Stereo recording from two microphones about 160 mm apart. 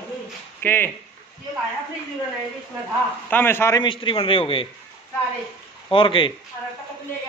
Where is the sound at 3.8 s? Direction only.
30° left (ahead or behind).